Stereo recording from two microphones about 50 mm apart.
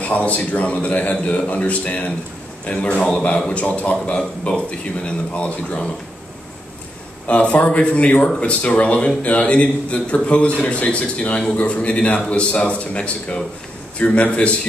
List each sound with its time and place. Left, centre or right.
0.0 s a man's voice: left
7.2 s a man's voice: left